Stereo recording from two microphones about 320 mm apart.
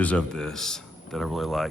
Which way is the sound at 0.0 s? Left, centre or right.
Centre.